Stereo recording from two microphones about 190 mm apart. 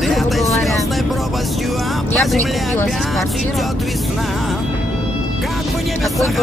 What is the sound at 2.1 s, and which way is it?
Speech, centre (ahead or behind).